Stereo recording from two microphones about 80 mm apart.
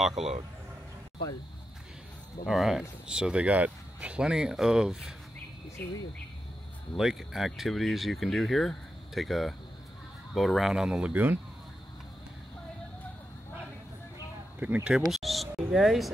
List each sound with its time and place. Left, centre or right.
0.2 s speech: centre
2.4 s speech: centre
7.0 s speech: centre
14.6 s speech: centre
15.0 s a sound: centre